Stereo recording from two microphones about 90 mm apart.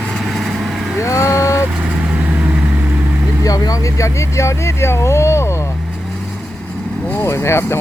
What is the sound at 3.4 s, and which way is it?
Vehicle, 45° left (ahead or behind).